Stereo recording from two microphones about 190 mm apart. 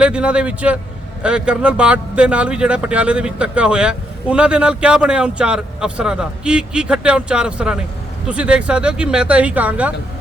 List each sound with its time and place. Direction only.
0.0 s speech: 5° right (ahead or behind)